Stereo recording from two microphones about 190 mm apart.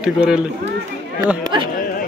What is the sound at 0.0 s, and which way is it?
Speech, 5° right (ahead or behind).